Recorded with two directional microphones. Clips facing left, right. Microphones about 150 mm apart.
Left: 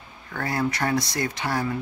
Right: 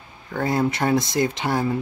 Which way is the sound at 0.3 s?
25° right (ahead or behind).